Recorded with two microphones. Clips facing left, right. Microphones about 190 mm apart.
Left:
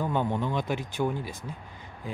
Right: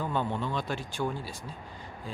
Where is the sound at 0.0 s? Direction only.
15° left (ahead or behind).